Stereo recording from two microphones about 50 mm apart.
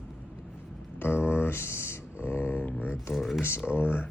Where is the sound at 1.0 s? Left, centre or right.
Left.